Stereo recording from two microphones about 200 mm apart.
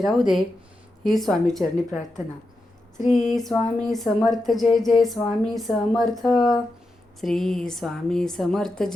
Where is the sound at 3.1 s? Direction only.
40° left (ahead or behind).